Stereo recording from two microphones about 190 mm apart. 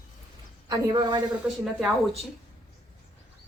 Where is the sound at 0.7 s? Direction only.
20° right (ahead or behind).